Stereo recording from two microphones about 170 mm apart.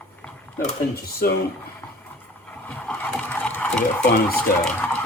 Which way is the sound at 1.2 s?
65° left (ahead or behind).